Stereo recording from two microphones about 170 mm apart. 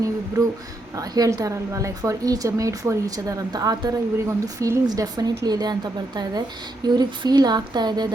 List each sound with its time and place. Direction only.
0.9 s a woman's voice: 20° right (ahead or behind)